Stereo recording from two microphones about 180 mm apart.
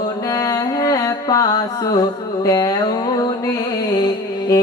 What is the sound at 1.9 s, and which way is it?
Music, 20° left (ahead or behind).